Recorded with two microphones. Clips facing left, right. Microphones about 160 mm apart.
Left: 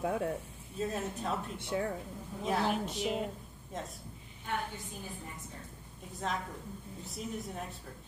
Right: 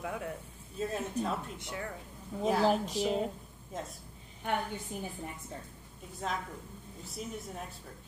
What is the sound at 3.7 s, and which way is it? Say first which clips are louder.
Speech: right 1 dB; centre (ahead or behind).